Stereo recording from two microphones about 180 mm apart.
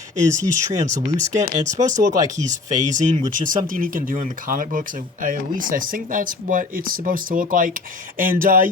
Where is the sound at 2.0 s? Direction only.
20° right (ahead or behind).